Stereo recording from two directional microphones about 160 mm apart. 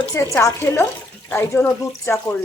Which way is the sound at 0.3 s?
15° left (ahead or behind).